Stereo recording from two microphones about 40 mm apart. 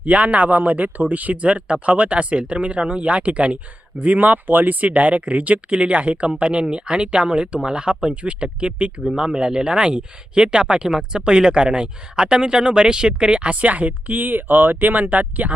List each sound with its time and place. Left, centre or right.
0.0 s speech: right